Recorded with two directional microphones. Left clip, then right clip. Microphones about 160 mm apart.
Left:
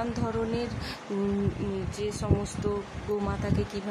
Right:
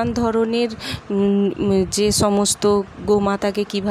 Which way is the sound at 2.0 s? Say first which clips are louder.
Right 11 dB; 60° right (ahead or behind).